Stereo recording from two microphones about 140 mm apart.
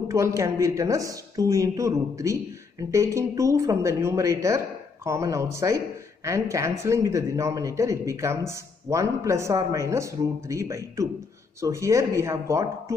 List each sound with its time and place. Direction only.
0.1 s speech: 20° right (ahead or behind)